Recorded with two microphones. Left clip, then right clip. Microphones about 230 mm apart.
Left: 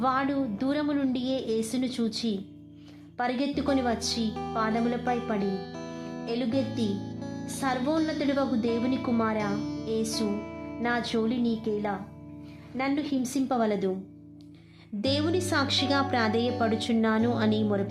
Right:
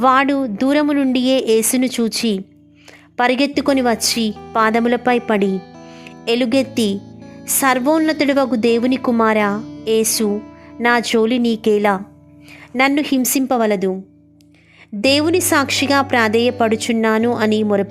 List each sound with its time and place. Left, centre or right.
0.0 s speech: right
5.4 s music: centre
6.2 s speech: right
7.0 s music: centre
7.4 s speech: right
9.6 s music: centre
9.8 s speech: right
15.0 s speech: right